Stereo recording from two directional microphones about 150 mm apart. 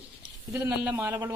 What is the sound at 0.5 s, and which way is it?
Speech, 15° right (ahead or behind).